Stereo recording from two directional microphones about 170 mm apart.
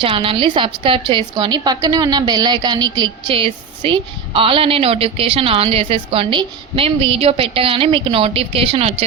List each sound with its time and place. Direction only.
0.0 s a woman's voice: 30° right (ahead or behind)